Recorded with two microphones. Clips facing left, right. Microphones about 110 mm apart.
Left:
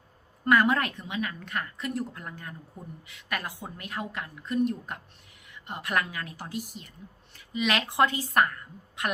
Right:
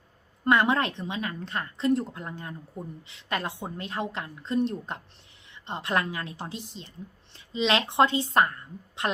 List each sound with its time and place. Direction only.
0.4 s a woman's voice: 25° right (ahead or behind)